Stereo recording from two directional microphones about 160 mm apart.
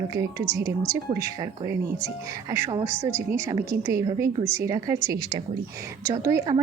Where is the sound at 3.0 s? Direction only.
15° right (ahead or behind).